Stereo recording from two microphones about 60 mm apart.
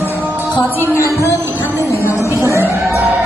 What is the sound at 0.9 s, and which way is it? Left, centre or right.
Music, left.